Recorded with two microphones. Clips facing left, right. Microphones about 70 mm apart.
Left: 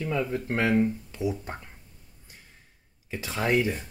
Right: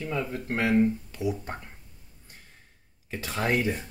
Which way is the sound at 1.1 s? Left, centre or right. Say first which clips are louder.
Even; left.